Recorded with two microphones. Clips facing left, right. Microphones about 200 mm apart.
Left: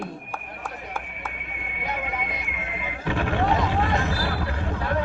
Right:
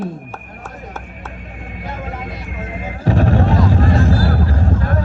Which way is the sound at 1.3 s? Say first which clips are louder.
Right 6 dB; 40° right (ahead or behind).